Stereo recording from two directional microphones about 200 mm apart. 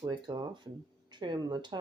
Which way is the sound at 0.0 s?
20° right (ahead or behind).